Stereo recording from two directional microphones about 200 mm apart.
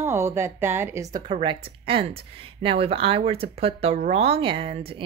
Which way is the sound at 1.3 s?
25° right (ahead or behind).